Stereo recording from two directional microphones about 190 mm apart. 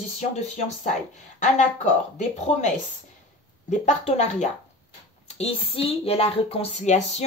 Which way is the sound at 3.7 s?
40° left (ahead or behind).